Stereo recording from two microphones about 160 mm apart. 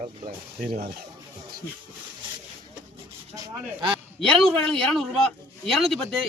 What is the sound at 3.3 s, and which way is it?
Speech, 25° right (ahead or behind).